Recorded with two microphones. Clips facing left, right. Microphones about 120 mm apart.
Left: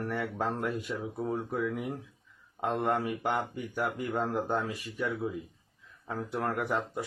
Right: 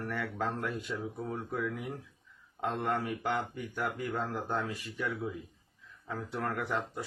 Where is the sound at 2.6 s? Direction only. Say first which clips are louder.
Left 3 dB; 15° left (ahead or behind).